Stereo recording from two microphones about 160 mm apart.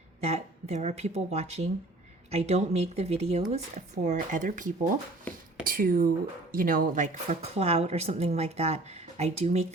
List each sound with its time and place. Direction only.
0.2 s a woman's voice: 40° right (ahead or behind)